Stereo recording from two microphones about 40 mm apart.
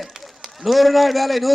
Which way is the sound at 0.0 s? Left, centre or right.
Centre.